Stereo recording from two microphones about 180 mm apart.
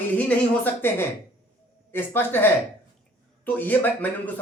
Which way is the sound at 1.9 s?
10° left (ahead or behind).